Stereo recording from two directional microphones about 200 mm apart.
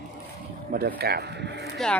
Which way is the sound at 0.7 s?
50° right (ahead or behind).